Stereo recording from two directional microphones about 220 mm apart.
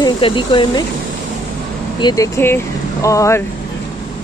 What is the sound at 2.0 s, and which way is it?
A woman's voice, 15° left (ahead or behind).